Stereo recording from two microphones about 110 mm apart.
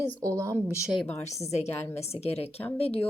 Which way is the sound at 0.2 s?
30° right (ahead or behind).